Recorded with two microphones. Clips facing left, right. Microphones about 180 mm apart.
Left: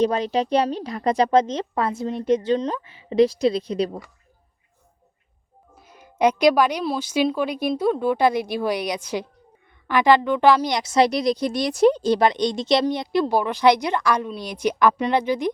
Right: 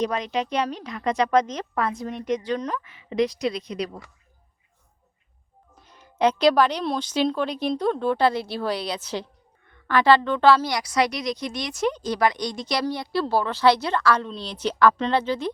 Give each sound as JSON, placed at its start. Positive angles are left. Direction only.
{"t": 0.0, "sound": "speech", "side_deg": 35}
{"t": 5.8, "sound": "a woman's voice", "side_deg": 10}